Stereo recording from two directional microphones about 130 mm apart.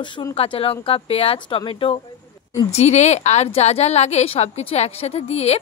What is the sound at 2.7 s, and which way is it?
A woman's voice, 60° left (ahead or behind).